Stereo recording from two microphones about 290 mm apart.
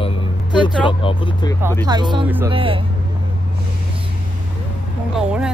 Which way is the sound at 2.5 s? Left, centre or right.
Centre.